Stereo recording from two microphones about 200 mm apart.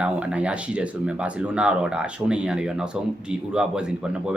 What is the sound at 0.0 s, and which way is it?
Speech, 5° right (ahead or behind).